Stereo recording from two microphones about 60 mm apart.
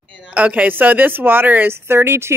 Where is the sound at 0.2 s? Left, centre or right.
Right.